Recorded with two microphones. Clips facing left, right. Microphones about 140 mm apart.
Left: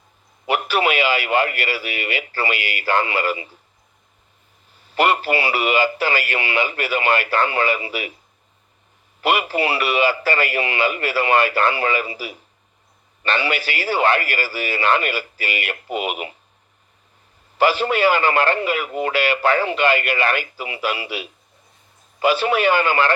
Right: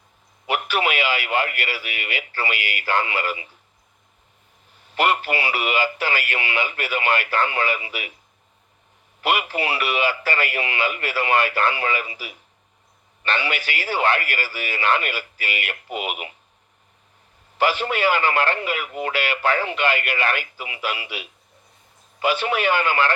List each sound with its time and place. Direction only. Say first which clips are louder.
0.4 s a man's voice: left 3 dB; 30° left (ahead or behind)
4.9 s a man's voice: left 3 dB; 30° left (ahead or behind)
9.2 s a man's voice: left 3 dB; 30° left (ahead or behind)
13.4 s a man's voice: left 4 dB; 35° left (ahead or behind)
17.6 s a man's voice: left 4 dB; 35° left (ahead or behind)